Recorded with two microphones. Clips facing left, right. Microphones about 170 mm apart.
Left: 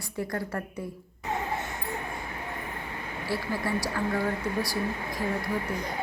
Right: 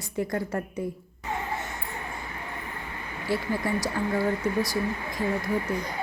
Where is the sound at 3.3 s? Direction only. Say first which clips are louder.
Right 3 dB; 20° right (ahead or behind).